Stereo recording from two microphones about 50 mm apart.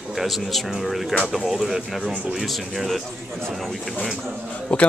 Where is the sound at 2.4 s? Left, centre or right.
Centre.